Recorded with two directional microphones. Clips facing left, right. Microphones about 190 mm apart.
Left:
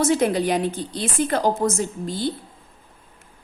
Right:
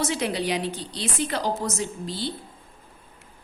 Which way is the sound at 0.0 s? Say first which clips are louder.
Left 7 dB; 50° left (ahead or behind).